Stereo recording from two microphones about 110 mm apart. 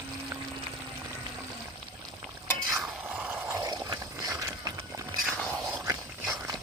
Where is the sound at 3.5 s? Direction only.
35° right (ahead or behind).